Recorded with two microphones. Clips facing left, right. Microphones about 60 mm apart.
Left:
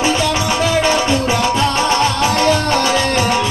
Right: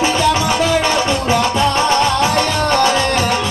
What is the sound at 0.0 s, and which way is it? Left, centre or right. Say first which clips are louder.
Music: right 2 dB; centre.